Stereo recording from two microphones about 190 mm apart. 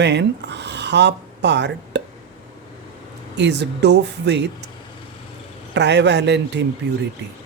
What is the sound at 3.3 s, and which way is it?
Speech, 65° right (ahead or behind).